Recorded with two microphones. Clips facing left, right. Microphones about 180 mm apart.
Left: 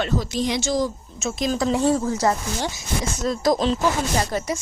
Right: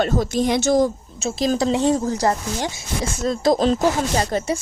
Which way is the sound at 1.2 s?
30° right (ahead or behind).